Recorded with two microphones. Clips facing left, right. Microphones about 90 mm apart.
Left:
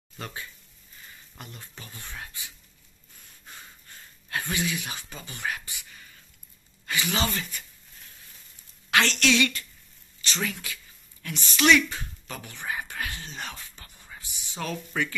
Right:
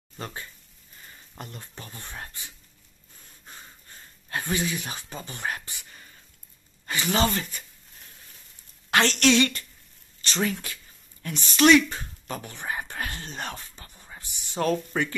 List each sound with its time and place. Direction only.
0.2 s speech: 35° right (ahead or behind)
8.9 s speech: 35° right (ahead or behind)
13.6 s whispering: 30° right (ahead or behind)
14.5 s speech: 45° right (ahead or behind)